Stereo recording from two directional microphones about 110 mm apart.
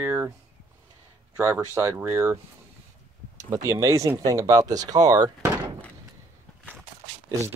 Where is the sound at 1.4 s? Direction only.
20° right (ahead or behind).